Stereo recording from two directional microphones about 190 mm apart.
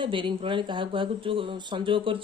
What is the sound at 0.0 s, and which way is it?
Speech, 25° right (ahead or behind).